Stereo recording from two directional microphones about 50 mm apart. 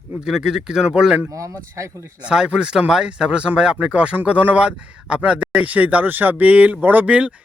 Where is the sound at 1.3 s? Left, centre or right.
Right.